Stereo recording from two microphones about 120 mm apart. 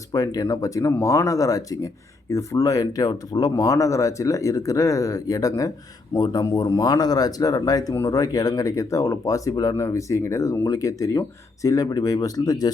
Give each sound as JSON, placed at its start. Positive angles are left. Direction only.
{"t": 0.1, "sound": "speech", "side_deg": 30}